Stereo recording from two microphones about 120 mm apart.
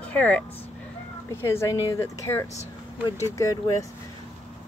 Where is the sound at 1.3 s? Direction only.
20° left (ahead or behind).